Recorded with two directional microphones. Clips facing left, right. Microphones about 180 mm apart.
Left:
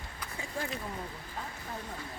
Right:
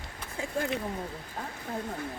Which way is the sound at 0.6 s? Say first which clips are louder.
Right 6 dB; 70° right (ahead or behind).